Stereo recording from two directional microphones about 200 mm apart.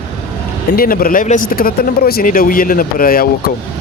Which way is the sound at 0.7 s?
45° left (ahead or behind).